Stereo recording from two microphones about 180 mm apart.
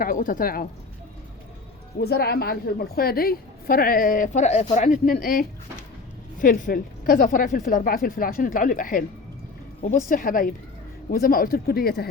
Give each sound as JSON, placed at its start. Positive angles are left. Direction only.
{"t": 0.0, "sound": "speech", "side_deg": 50}
{"t": 2.0, "sound": "a woman's voice", "side_deg": 60}
{"t": 10.1, "sound": "a woman's voice", "side_deg": 50}